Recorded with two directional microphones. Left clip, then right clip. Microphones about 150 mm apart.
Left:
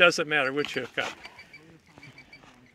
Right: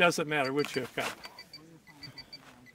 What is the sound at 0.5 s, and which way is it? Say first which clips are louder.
Speech: left 2 dB; 90° right.